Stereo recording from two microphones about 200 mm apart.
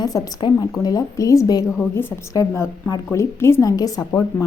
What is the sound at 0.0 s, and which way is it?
A woman's voice, 20° left (ahead or behind).